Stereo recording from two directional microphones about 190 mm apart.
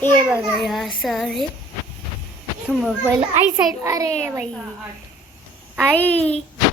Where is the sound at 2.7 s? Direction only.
Centre (ahead or behind).